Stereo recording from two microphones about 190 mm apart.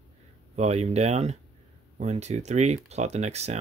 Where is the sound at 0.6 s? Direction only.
35° right (ahead or behind).